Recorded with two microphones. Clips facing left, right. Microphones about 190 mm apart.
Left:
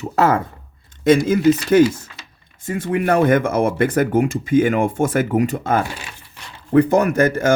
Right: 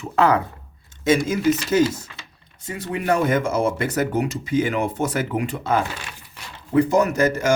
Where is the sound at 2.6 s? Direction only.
50° left (ahead or behind).